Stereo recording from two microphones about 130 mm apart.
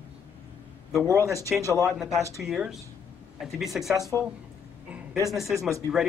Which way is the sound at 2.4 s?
5° right (ahead or behind).